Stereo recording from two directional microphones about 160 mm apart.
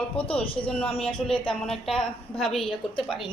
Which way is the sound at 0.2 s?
5° left (ahead or behind).